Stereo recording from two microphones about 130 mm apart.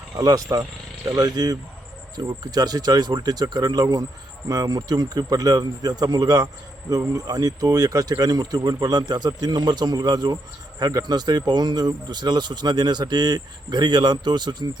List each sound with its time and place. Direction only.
0.2 s speech: 25° right (ahead or behind)